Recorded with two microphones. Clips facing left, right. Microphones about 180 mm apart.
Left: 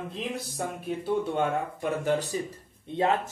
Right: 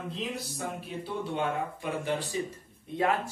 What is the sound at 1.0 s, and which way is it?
Speech, 45° left (ahead or behind).